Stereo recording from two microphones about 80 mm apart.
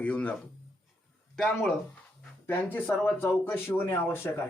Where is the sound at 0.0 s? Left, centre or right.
Centre.